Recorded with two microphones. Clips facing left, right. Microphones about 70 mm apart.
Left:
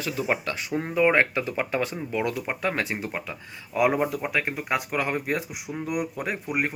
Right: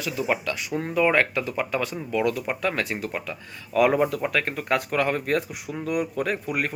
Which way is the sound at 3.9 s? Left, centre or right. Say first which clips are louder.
Right 3 dB; centre.